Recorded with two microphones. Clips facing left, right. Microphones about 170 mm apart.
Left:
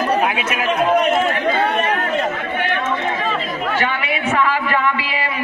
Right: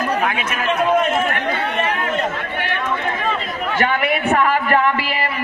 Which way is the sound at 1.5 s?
50° left (ahead or behind).